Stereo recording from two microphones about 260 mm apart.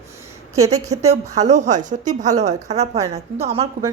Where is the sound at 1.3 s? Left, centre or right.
Right.